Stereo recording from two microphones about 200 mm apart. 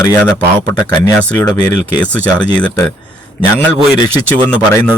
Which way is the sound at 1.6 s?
10° left (ahead or behind).